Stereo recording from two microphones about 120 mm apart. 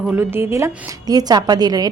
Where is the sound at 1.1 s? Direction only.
35° right (ahead or behind).